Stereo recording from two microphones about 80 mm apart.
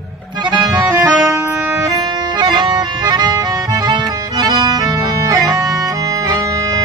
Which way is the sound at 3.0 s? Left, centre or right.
Right.